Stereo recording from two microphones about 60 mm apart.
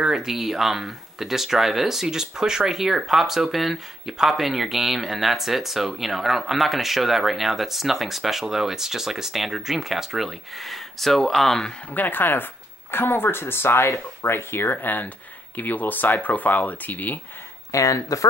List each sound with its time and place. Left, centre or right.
0.0 s speech: centre
11.9 s speech: left
17.6 s speech: left